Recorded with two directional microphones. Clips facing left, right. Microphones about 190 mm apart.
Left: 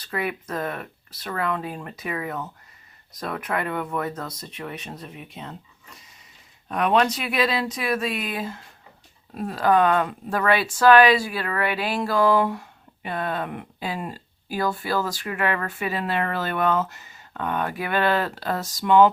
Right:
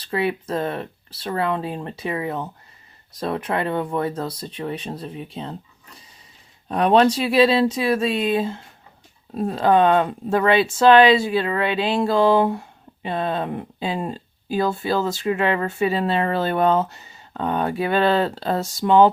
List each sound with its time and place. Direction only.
0.0 s speech: 30° right (ahead or behind)
6.7 s speech: 30° right (ahead or behind)